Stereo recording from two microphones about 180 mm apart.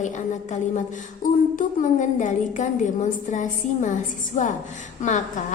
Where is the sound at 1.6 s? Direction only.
45° left (ahead or behind).